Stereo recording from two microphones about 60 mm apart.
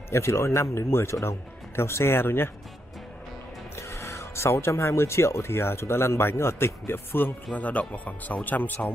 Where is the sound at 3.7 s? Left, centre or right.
Left.